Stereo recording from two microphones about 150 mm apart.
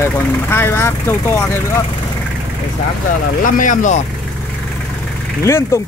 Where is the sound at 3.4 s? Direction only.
60° left (ahead or behind).